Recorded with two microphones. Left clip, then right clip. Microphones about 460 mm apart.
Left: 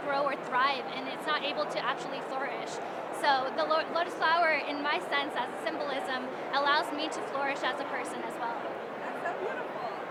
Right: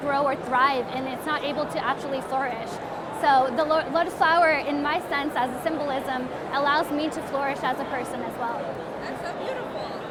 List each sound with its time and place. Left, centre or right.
0.1 s a woman's voice: right
3.2 s a woman's voice: right